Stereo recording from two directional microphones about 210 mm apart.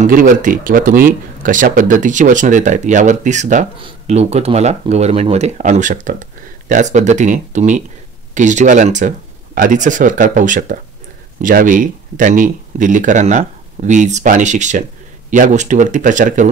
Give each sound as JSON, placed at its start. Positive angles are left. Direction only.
{"t": 0.0, "sound": "speech", "side_deg": -40}